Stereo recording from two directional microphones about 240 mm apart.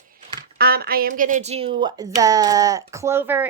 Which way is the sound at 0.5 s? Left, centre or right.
Right.